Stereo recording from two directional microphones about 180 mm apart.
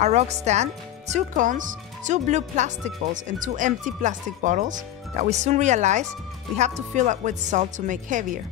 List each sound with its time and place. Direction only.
0.0 s speech: 40° right (ahead or behind)